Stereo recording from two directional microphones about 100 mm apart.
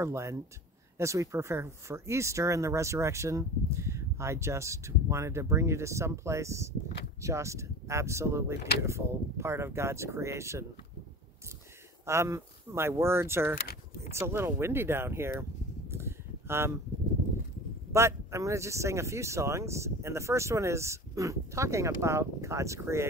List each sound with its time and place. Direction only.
0.0 s speech: 30° right (ahead or behind)
12.1 s speech: 30° right (ahead or behind)
15.9 s a sound: 25° right (ahead or behind)
17.9 s speech: 30° right (ahead or behind)